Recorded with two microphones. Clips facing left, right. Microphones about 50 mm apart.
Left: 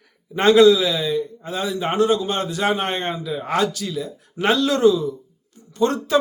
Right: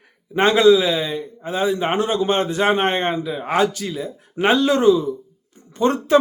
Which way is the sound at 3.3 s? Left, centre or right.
Centre.